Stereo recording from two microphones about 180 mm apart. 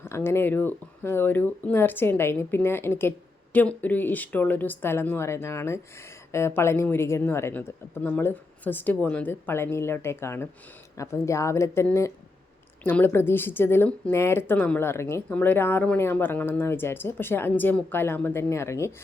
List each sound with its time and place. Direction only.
0.0 s a woman's voice: 10° left (ahead or behind)